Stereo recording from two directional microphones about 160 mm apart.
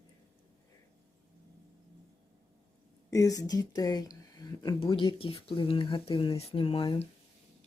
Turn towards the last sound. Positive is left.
turn(degrees=35)  # may be behind; listen again after turning